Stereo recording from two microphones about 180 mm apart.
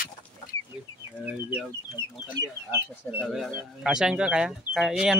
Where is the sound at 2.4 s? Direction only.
90° right.